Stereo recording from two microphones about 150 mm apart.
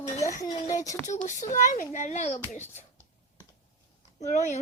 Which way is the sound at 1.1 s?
55° left (ahead or behind).